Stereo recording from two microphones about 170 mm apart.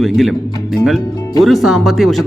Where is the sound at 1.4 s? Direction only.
Centre (ahead or behind).